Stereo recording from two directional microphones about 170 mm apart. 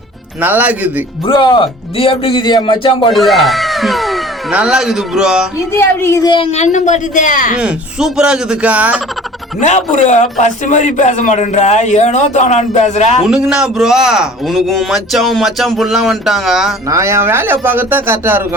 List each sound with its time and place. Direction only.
0.4 s speech: 10° right (ahead or behind)
1.3 s speech: 30° left (ahead or behind)
3.1 s speech: centre (ahead or behind)
5.7 s speech: 15° left (ahead or behind)
6.5 s a man's voice: 45° left (ahead or behind)
7.5 s a man's voice: 5° right (ahead or behind)
9.6 s a man's voice: 45° left (ahead or behind)
13.2 s a man's voice: 5° right (ahead or behind)
16.9 s speech: 15° right (ahead or behind)